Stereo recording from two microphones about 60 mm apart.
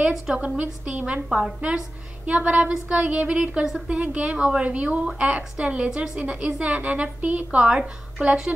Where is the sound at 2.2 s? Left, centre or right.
Centre.